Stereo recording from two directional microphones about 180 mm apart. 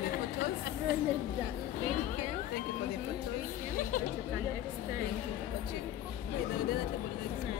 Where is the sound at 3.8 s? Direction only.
45° left (ahead or behind).